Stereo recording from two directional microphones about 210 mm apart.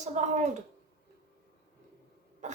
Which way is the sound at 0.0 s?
35° right (ahead or behind).